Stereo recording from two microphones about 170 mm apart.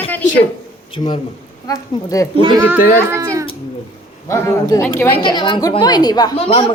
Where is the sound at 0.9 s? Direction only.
30° left (ahead or behind).